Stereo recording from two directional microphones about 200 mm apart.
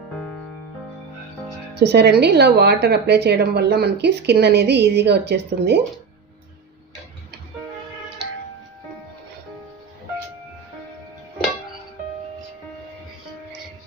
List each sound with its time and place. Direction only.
1.8 s speech: 55° right (ahead or behind)